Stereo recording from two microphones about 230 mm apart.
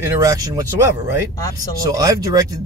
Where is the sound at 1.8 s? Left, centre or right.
Centre.